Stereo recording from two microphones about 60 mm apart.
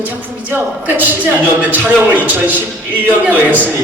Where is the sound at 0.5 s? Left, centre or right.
Right.